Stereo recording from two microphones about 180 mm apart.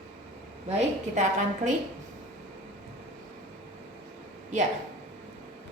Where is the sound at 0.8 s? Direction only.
40° right (ahead or behind).